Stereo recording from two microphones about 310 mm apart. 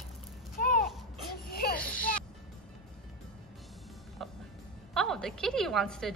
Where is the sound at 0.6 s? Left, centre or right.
Left.